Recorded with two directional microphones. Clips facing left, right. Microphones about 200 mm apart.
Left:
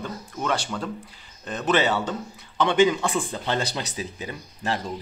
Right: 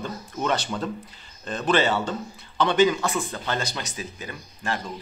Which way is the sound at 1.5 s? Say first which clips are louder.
Even; 15° left (ahead or behind).